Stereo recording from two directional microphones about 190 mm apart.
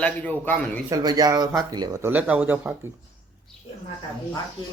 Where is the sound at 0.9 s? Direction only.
20° right (ahead or behind).